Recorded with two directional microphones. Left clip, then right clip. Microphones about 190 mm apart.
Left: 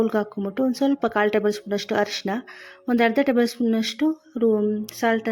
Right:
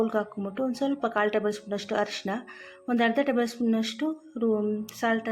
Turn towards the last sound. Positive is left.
turn(degrees=40)  # may be behind; listen again after turning